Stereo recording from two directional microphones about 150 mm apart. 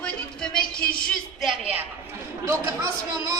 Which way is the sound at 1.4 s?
10° right (ahead or behind).